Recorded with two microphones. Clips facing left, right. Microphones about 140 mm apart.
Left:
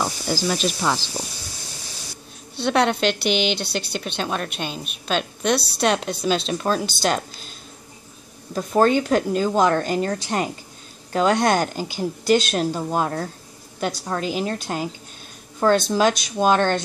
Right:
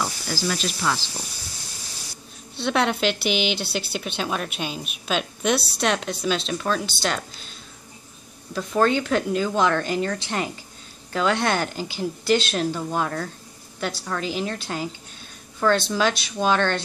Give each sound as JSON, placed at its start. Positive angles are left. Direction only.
{"t": 0.0, "sound": "speech", "side_deg": 20}
{"t": 2.5, "sound": "a woman's voice", "side_deg": 0}
{"t": 6.2, "sound": "speech", "side_deg": 40}
{"t": 8.5, "sound": "speech", "side_deg": 40}
{"t": 12.9, "sound": "a woman's voice", "side_deg": 30}